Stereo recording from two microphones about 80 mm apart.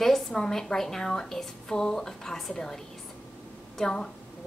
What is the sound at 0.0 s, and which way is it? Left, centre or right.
A woman's voice, centre.